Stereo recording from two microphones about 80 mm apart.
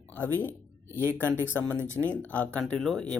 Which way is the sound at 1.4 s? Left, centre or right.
Right.